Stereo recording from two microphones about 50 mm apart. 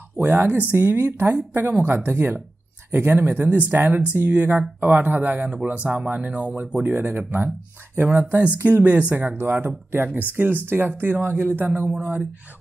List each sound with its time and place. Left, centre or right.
0.2 s speech: right